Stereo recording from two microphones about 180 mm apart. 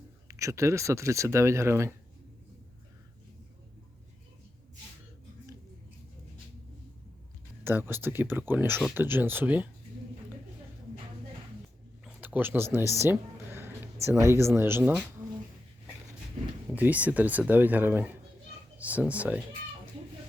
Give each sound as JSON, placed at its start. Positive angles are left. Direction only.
{"t": 0.3, "sound": "speech", "side_deg": -15}
{"t": 7.6, "sound": "speech", "side_deg": -10}
{"t": 12.0, "sound": "music", "side_deg": -10}
{"t": 14.3, "sound": "speech", "side_deg": -15}
{"t": 16.7, "sound": "speech", "side_deg": -10}